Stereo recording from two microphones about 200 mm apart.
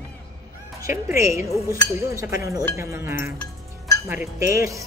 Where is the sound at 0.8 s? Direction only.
15° right (ahead or behind).